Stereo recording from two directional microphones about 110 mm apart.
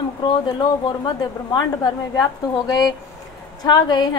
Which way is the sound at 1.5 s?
40° left (ahead or behind).